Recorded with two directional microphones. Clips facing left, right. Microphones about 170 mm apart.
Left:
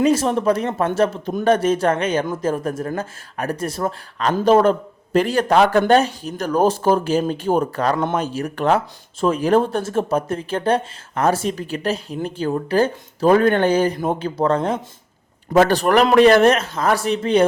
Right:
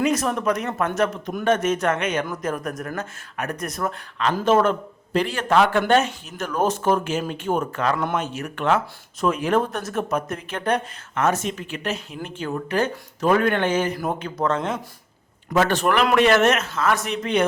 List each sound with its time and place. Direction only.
0.0 s speech: 30° left (ahead or behind)